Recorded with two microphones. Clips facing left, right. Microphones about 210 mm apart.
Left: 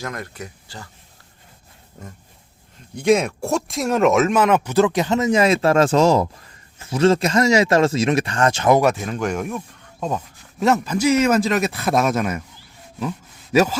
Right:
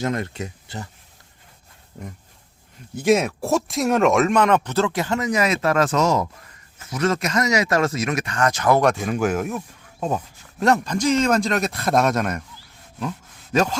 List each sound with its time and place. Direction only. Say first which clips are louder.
0.0 s speech: right 6 dB; 25° right (ahead or behind)
2.9 s speech: left 1 dB; 5° right (ahead or behind); by 8.8 s 25° left (ahead or behind)
8.8 s a man's voice: even; 5° left (ahead or behind)
10.6 s a man's voice: left 1 dB; 5° left (ahead or behind)